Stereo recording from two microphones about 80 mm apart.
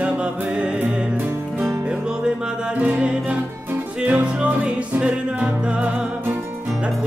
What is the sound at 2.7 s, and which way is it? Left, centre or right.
Music, centre.